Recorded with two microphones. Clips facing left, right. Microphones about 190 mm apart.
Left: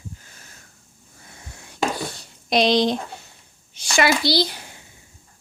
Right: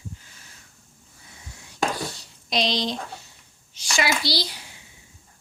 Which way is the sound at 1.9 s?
55° left (ahead or behind).